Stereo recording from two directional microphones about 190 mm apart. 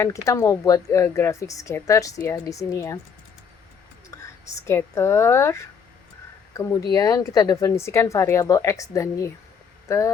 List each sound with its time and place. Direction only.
0.0 s speech: 15° left (ahead or behind)
4.1 s a sound: 15° left (ahead or behind)
4.6 s speech: 15° left (ahead or behind)